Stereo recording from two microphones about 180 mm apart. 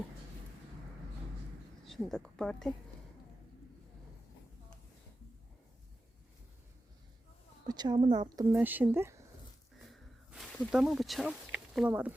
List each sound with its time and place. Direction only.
1.8 s a woman's voice: centre (ahead or behind)
7.6 s speech: 25° right (ahead or behind)
8.5 s speech: 10° right (ahead or behind)
9.8 s snake: centre (ahead or behind)